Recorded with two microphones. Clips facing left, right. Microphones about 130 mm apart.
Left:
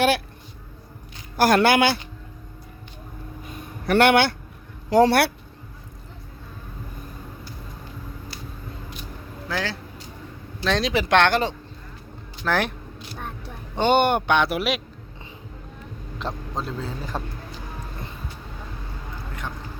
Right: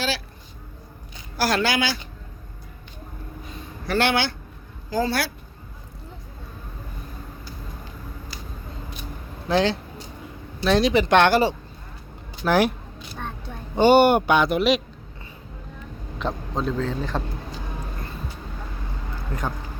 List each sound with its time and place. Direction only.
1.4 s a man's voice: 55° left (ahead or behind)
3.8 s a man's voice: 65° left (ahead or behind)
9.5 s speech: 25° right (ahead or behind)
10.6 s speech: 5° right (ahead or behind)
13.7 s speech: 5° right (ahead or behind)
16.1 s a man's voice: centre (ahead or behind)